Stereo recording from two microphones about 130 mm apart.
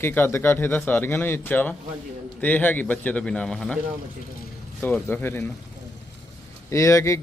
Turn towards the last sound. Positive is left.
turn(degrees=25)  # may be behind; listen again after turning